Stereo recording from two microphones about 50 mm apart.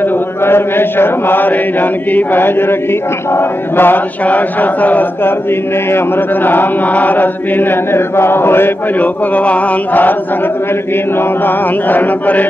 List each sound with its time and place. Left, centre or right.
0.0 s chant: left
4.3 s chant: left
5.9 s chant: left
9.0 s chant: left
11.1 s chant: left